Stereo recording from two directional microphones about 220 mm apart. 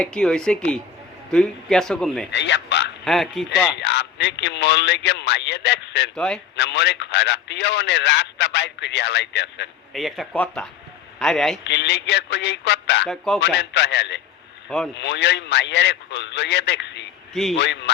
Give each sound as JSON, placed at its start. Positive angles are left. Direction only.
{"t": 0.0, "sound": "a man's voice", "side_deg": 5}
{"t": 2.3, "sound": "a sound", "side_deg": 55}
{"t": 3.0, "sound": "speech", "side_deg": 0}
{"t": 3.8, "sound": "speech", "side_deg": 50}
{"t": 6.1, "sound": "a man's voice", "side_deg": 5}
{"t": 6.6, "sound": "speech", "side_deg": 50}
{"t": 9.9, "sound": "a man's voice", "side_deg": 0}
{"t": 11.6, "sound": "speech", "side_deg": 50}
{"t": 13.1, "sound": "a man's voice", "side_deg": 0}
{"t": 13.4, "sound": "speech", "side_deg": 50}